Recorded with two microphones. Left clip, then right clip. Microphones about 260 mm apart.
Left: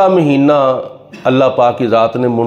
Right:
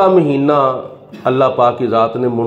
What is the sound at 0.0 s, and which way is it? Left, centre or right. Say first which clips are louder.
A man's voice: left 1 dB; left.